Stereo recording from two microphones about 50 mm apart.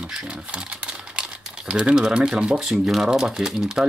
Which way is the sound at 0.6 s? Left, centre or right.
Right.